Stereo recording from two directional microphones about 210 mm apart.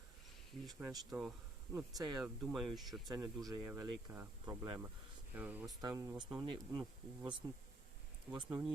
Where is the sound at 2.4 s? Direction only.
Centre (ahead or behind).